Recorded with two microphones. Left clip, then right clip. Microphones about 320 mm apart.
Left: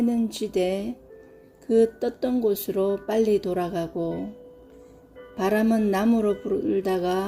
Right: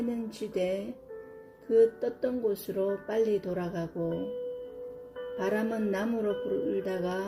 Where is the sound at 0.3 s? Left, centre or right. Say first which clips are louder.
Left 2 dB; left.